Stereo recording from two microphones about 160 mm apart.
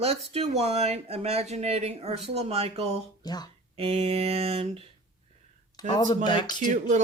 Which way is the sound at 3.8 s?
35° right (ahead or behind).